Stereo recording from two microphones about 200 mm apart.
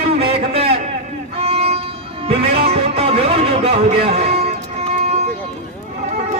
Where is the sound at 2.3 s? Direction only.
30° right (ahead or behind).